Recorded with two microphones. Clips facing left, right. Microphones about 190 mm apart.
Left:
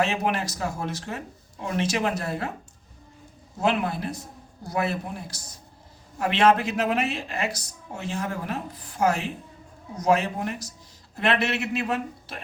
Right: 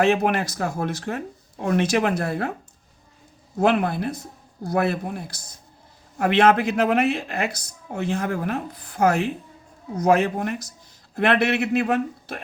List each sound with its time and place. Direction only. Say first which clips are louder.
0.0 s speech: right 5 dB; 60° right (ahead or behind)
3.6 s speech: right 5 dB; 55° right (ahead or behind)